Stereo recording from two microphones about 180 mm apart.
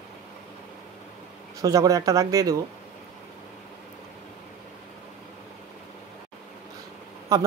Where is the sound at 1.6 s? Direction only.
20° right (ahead or behind).